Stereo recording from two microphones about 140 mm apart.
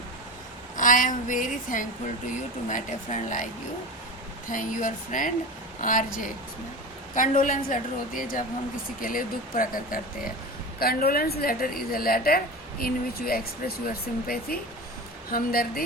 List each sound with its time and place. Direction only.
0.8 s a woman's voice: 70° left (ahead or behind)
4.4 s a woman's voice: 70° left (ahead or behind)
7.1 s a woman's voice: 70° left (ahead or behind); by 15.8 s 90° left